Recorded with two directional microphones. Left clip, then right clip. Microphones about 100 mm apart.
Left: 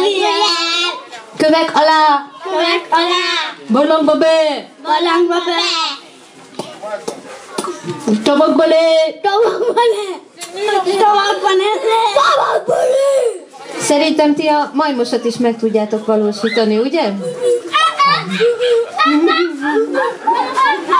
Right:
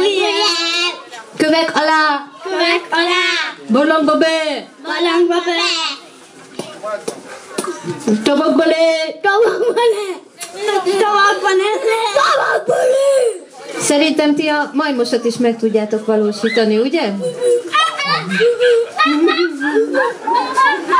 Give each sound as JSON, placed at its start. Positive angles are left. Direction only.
{"t": 0.0, "sound": "child singing", "side_deg": -20}
{"t": 1.4, "sound": "a child's voice", "side_deg": -20}
{"t": 7.1, "sound": "a woman's voice", "side_deg": -20}